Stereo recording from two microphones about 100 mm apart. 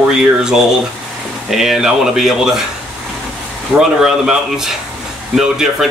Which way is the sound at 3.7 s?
5° right (ahead or behind).